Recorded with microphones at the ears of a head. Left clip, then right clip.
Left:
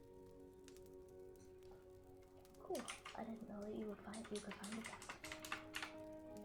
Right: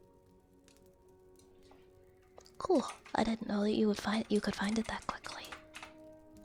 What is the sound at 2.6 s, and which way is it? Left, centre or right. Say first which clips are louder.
Speech: right 16 dB; right.